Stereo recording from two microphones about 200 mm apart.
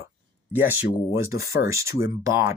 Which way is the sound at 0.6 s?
10° right (ahead or behind).